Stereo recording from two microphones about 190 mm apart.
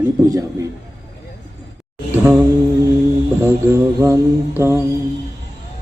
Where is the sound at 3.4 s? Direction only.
15° right (ahead or behind).